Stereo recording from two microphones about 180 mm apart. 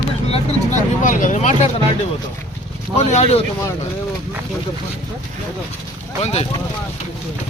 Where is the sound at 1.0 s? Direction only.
45° left (ahead or behind).